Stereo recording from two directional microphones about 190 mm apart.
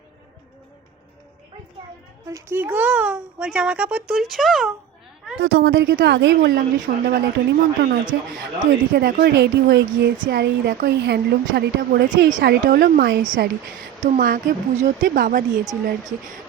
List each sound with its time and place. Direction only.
2.2 s speech: 15° right (ahead or behind)
5.4 s a woman's voice: 85° right
6.0 s a woman's voice: 65° right (ahead or behind)
10.3 s speech: 50° right (ahead or behind)